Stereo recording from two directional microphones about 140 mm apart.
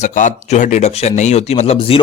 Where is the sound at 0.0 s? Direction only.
60° left (ahead or behind).